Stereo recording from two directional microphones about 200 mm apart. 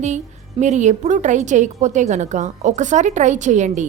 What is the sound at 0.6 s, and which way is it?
A woman's voice, 35° right (ahead or behind).